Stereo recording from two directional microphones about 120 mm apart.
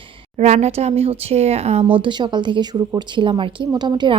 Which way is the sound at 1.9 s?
40° right (ahead or behind).